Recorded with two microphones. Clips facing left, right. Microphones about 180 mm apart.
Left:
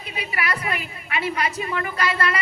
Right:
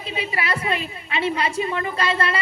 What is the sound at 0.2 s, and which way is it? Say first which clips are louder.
A woman's voice: right 2 dB; 25° right (ahead or behind).